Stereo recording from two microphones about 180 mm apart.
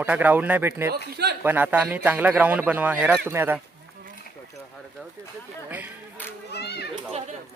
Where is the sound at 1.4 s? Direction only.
10° right (ahead or behind).